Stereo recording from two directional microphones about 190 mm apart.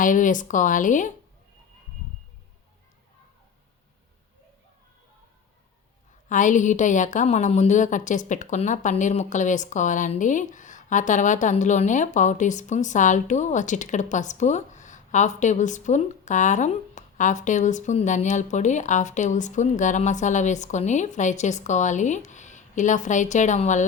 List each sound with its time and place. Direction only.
0.0 s speech: 45° left (ahead or behind)
6.2 s a woman's voice: 40° left (ahead or behind)